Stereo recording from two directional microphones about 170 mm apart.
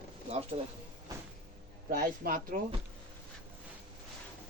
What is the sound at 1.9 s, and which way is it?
Speech, 55° right (ahead or behind).